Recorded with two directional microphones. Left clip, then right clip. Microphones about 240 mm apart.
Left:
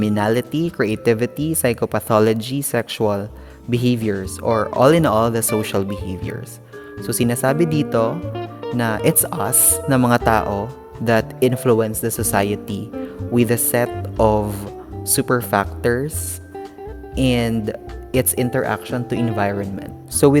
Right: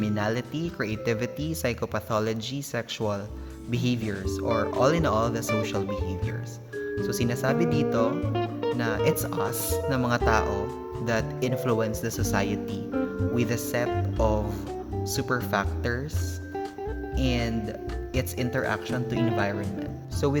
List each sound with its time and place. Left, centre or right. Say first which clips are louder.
0.0 s speech: left 10 dB; left
8.1 s speech: left 1 dB; centre
8.8 s speech: left 9 dB; left
17.2 s speech: left 10 dB; left